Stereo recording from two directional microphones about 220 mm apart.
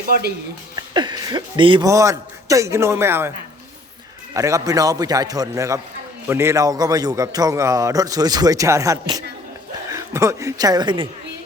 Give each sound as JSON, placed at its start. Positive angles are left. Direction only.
{"t": 0.1, "sound": "speech", "side_deg": -45}
{"t": 0.8, "sound": "speech", "side_deg": -20}
{"t": 4.4, "sound": "a man's voice", "side_deg": -15}